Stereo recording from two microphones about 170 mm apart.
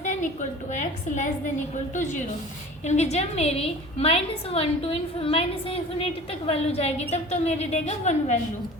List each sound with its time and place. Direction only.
0.0 s a sound: 45° left (ahead or behind)
0.7 s a woman's voice: 45° left (ahead or behind)
2.8 s a woman's voice: 40° left (ahead or behind)